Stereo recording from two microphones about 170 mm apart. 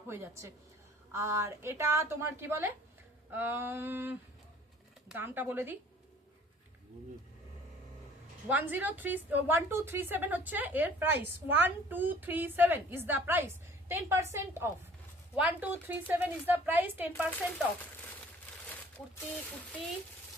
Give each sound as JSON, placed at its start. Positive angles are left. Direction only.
{"t": 0.1, "sound": "a woman's voice", "side_deg": -15}
{"t": 8.4, "sound": "a woman's voice", "side_deg": -10}